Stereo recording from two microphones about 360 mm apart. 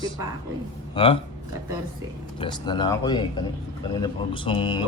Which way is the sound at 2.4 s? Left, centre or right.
Centre.